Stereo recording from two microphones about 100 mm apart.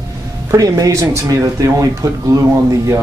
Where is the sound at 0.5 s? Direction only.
35° right (ahead or behind).